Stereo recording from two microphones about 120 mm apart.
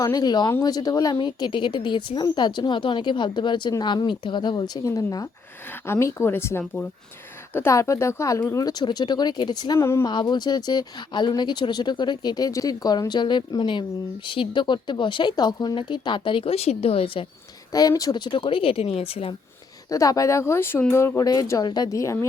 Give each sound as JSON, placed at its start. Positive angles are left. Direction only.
{"t": 0.0, "sound": "a woman's voice", "side_deg": 35}
{"t": 4.9, "sound": "a woman's voice", "side_deg": 20}
{"t": 9.7, "sound": "speech", "side_deg": 25}
{"t": 10.1, "sound": "a woman's voice", "side_deg": 40}
{"t": 17.7, "sound": "speech", "side_deg": 30}
{"t": 19.9, "sound": "speech", "side_deg": 30}